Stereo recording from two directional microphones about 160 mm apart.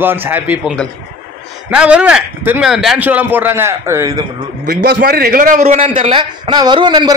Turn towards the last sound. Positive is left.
turn(degrees=-30)  # may be behind; listen again after turning